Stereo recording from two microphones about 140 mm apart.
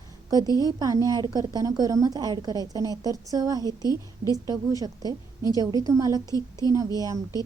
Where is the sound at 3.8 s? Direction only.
25° left (ahead or behind).